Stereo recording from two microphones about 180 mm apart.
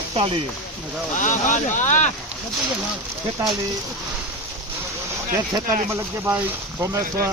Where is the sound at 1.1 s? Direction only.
45° left (ahead or behind).